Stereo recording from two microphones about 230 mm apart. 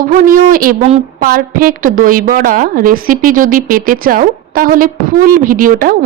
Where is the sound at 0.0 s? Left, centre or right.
Right.